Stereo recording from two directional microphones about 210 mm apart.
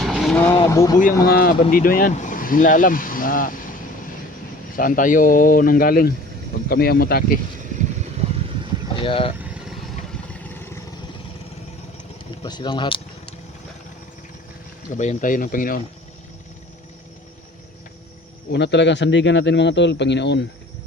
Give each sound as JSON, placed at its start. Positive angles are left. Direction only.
{"t": 0.0, "sound": "vehicle", "side_deg": 0}
{"t": 0.5, "sound": "speech", "side_deg": 15}
{"t": 1.3, "sound": "speech", "side_deg": 45}
{"t": 4.8, "sound": "speech", "side_deg": 40}
{"t": 9.0, "sound": "speech", "side_deg": 25}
{"t": 10.3, "sound": "vehicle", "side_deg": 10}
{"t": 12.4, "sound": "speech", "side_deg": 20}
{"t": 14.9, "sound": "speech", "side_deg": 35}
{"t": 18.5, "sound": "a man's voice", "side_deg": 55}